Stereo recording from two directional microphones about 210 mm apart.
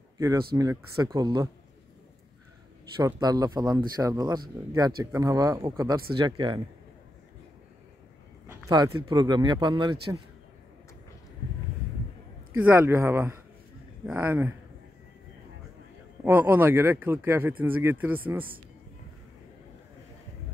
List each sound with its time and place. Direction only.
0.6 s speech: 15° right (ahead or behind)
3.0 s speech: 20° right (ahead or behind)
8.5 s a sound: 15° right (ahead or behind)
9.1 s speech: 20° right (ahead or behind)
12.5 s speech: 10° right (ahead or behind)
16.3 s speech: 10° right (ahead or behind)